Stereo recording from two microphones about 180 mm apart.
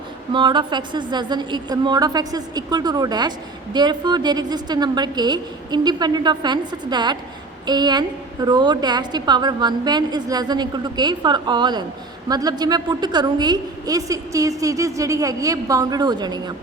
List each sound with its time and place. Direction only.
0.3 s a woman's voice: 25° right (ahead or behind)